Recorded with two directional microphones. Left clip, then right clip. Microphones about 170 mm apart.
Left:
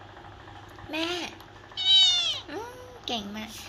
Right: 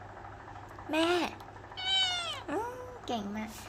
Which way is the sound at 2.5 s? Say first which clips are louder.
Right 2 dB; 35° right (ahead or behind).